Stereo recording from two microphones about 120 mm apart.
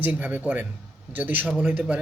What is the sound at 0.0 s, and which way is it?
A man's voice, 15° right (ahead or behind).